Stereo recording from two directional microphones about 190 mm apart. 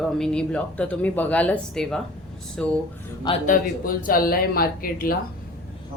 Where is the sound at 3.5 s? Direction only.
45° left (ahead or behind).